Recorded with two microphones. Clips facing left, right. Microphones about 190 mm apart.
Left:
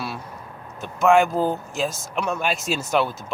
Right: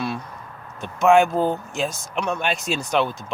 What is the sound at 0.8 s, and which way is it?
Speech, centre (ahead or behind).